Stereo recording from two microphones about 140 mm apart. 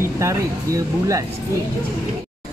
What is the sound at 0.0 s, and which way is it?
Speech, 20° right (ahead or behind).